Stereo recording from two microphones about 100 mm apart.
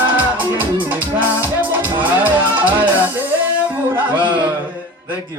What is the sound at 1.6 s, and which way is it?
Music, 20° right (ahead or behind).